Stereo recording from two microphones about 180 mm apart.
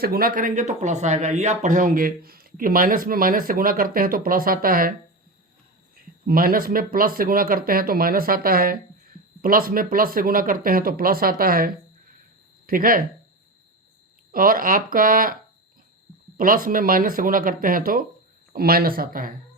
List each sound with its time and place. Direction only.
0.0 s speech: 55° right (ahead or behind)
6.2 s speech: 55° right (ahead or behind)
14.3 s speech: 50° right (ahead or behind)
16.4 s speech: 50° right (ahead or behind)